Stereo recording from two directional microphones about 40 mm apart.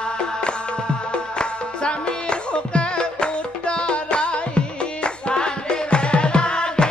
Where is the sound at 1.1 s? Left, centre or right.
Left.